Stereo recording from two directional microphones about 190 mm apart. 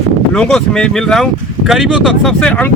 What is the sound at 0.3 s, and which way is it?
Speech, 5° left (ahead or behind).